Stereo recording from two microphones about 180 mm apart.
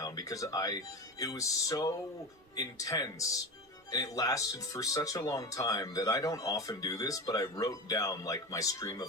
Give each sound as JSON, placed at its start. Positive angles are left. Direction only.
{"t": 0.0, "sound": "speech", "side_deg": 20}